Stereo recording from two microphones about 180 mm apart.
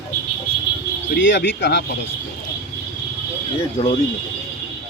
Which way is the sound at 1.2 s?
70° left (ahead or behind).